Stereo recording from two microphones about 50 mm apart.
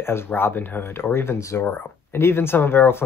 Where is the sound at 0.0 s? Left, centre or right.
Left.